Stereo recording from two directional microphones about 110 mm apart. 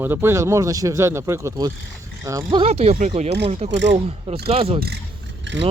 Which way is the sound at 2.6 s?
65° right (ahead or behind).